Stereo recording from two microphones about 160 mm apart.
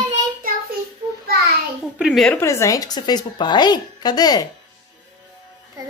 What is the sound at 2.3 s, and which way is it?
A woman's voice, 15° left (ahead or behind).